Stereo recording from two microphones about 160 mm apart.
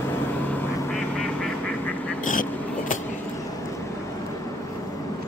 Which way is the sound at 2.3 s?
55° left (ahead or behind).